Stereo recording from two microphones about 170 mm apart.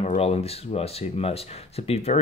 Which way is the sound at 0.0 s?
40° left (ahead or behind).